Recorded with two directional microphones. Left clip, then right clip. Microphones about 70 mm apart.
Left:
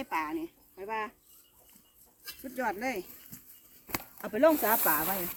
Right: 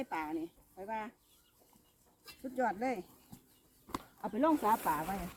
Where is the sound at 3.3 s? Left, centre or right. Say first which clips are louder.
Left 5 dB; left.